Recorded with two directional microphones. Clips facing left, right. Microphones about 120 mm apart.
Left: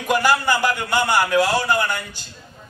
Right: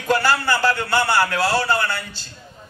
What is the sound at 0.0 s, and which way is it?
A man's voice, 15° left (ahead or behind).